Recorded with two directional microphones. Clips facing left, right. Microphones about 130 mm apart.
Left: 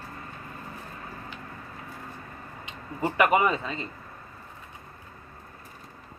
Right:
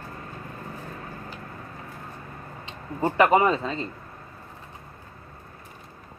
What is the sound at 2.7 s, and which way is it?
Speech, 30° right (ahead or behind).